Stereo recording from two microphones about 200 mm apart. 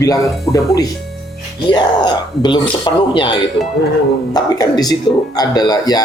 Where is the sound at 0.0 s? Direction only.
15° left (ahead or behind).